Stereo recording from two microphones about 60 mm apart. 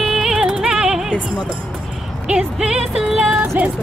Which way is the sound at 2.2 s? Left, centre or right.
Centre.